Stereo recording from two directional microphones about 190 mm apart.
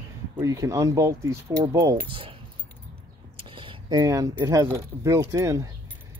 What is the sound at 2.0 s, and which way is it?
Speech, 30° right (ahead or behind).